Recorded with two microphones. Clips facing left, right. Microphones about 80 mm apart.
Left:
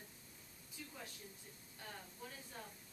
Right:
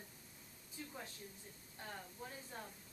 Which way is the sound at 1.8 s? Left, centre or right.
Right.